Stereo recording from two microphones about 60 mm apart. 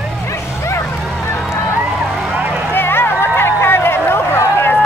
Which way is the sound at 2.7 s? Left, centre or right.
Left.